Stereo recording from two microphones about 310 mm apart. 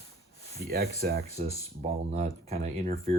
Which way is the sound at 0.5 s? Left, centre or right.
Right.